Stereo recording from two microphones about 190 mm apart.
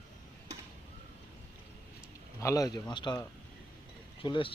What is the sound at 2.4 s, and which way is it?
Speech, 15° left (ahead or behind).